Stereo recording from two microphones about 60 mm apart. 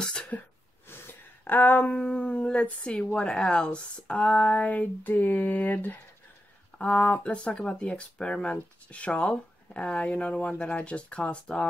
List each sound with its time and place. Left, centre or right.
0.0 s sneeze: centre
0.8 s a sound: left
2.6 s speech: centre